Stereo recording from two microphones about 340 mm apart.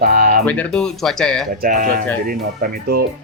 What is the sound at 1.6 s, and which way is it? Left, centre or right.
Speech, right.